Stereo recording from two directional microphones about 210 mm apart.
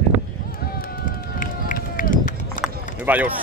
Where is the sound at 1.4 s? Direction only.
40° left (ahead or behind).